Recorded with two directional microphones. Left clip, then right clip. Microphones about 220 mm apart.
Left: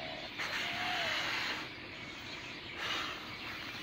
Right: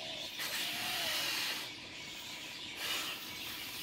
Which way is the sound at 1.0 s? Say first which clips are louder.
Left 1 dB; 15° right (ahead or behind).